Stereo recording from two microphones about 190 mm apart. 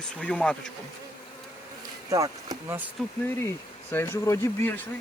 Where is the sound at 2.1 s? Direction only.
20° right (ahead or behind).